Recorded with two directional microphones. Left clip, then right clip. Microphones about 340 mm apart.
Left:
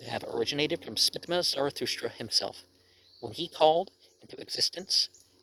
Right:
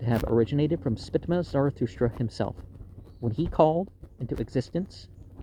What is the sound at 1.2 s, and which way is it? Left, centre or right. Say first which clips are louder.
Speech: right 2 dB; centre.